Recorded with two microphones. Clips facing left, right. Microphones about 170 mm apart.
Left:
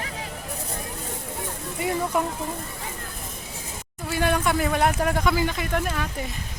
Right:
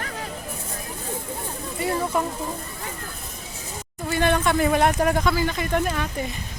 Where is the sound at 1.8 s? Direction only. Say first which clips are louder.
Right 1 dB; 15° left (ahead or behind).